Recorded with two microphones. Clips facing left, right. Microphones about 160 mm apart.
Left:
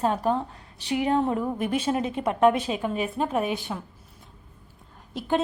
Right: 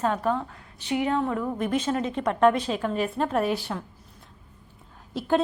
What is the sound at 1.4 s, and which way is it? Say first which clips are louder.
A woman's voice: even; 10° left (ahead or behind).